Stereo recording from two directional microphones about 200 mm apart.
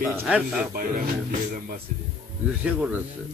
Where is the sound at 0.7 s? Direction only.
45° right (ahead or behind).